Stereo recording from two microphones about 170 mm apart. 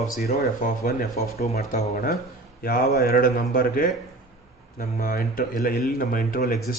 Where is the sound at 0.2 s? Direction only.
60° left (ahead or behind).